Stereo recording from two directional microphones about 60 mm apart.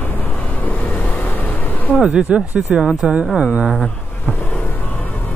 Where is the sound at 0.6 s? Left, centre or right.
Left.